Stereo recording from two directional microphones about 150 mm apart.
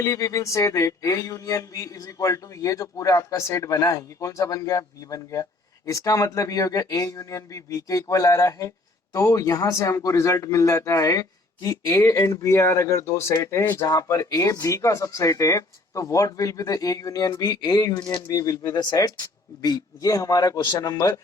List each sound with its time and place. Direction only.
0.0 s a man's voice: 20° left (ahead or behind)